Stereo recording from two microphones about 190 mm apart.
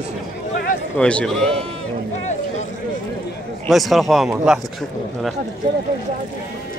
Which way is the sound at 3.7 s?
Centre (ahead or behind).